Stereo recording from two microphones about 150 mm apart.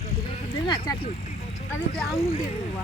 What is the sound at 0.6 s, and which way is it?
Speech, 30° left (ahead or behind).